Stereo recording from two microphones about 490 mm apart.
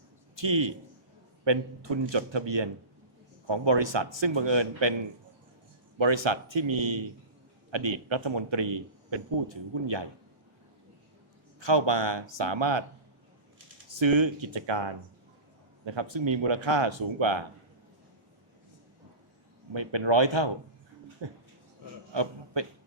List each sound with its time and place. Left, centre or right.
0.3 s a man's voice: right
6.0 s a man's voice: right
11.6 s a man's voice: right
13.9 s a man's voice: right
15.9 s a man's voice: right
19.7 s a man's voice: right
22.1 s a sound: right